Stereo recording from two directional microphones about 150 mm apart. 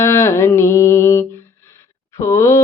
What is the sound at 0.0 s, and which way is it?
Mantra, 20° left (ahead or behind).